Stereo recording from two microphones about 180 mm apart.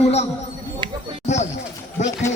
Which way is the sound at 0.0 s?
35° left (ahead or behind).